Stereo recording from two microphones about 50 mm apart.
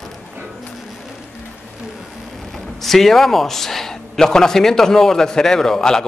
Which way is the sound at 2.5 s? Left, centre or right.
Centre.